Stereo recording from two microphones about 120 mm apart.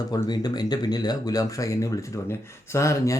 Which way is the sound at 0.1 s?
35° left (ahead or behind).